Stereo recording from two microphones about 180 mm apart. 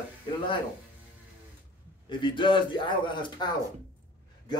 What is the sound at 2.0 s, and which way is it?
A man's voice, 25° left (ahead or behind).